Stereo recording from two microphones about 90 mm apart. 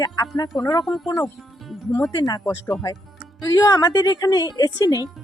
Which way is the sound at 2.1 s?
50° left (ahead or behind).